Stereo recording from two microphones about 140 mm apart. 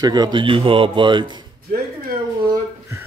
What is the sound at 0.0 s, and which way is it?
A man's voice, 30° right (ahead or behind).